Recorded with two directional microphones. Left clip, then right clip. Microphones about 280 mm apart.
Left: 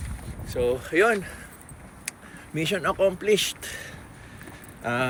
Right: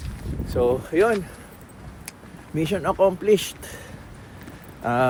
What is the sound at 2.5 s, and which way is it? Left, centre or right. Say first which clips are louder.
Speech: right 2 dB; centre.